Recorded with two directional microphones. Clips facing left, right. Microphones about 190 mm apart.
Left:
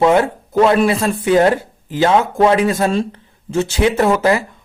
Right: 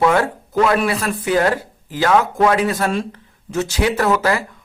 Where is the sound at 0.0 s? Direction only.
20° left (ahead or behind).